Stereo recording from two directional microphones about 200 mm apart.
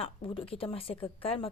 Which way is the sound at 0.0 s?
25° left (ahead or behind).